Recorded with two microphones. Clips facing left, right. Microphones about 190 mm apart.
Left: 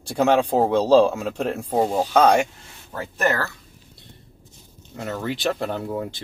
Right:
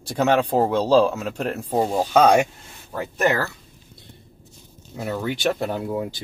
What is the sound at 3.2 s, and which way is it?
Speech, 15° right (ahead or behind).